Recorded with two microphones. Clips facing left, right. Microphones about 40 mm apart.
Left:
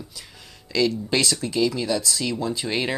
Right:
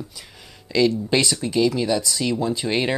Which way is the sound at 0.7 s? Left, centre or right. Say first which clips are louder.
Right 3 dB; centre.